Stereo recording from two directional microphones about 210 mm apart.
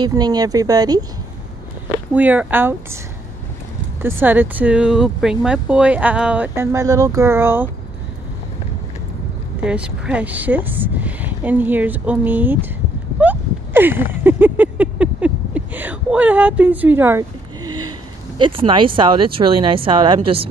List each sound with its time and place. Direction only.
0.0 s speech: 20° right (ahead or behind)
2.1 s speech: 5° right (ahead or behind)
4.0 s speech: 10° right (ahead or behind)
9.7 s speech: 5° right (ahead or behind)
13.2 s a sound: 10° right (ahead or behind)
17.6 s a sound: 90° right
18.4 s speech: 25° right (ahead or behind)